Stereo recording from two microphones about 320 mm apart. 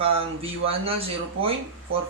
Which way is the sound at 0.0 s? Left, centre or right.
Centre.